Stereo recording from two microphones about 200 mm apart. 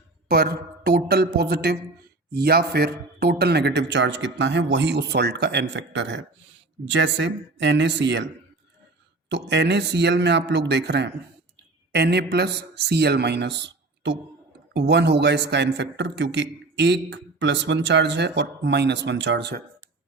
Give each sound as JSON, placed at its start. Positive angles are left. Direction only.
{"t": 0.3, "sound": "a woman's voice", "side_deg": -50}
{"t": 9.3, "sound": "a man's voice", "side_deg": -60}